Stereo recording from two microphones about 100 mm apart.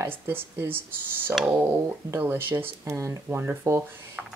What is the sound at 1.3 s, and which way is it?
Speech, 5° right (ahead or behind).